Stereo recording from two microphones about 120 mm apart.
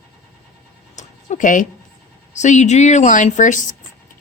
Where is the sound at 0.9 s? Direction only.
85° left.